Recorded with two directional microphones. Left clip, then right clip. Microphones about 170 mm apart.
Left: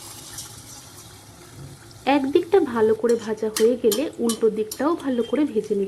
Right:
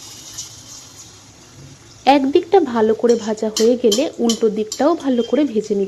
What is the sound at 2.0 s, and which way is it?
Speech, 15° right (ahead or behind).